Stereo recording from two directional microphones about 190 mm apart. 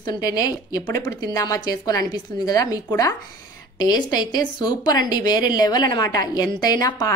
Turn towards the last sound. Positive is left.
turn(degrees=20)  # may be behind; listen again after turning